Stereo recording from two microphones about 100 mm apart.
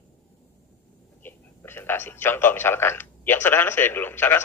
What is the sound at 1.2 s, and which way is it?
A man's voice, 20° left (ahead or behind).